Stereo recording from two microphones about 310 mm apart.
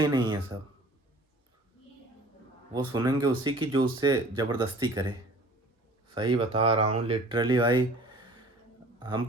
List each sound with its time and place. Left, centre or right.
0.0 s speech: centre
2.7 s speech: centre
6.1 s speech: centre